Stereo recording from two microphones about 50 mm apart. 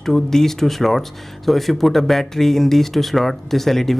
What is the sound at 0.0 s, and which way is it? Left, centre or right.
Speech, centre.